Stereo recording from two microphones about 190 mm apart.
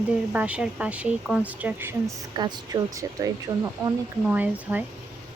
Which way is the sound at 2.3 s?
20° right (ahead or behind).